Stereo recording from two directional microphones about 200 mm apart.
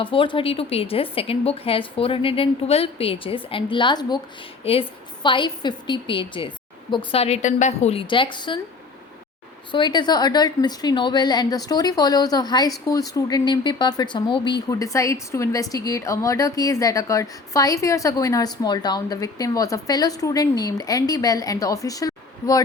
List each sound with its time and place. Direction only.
0.0 s a woman's voice: 25° left (ahead or behind)
9.7 s a woman's voice: 25° left (ahead or behind)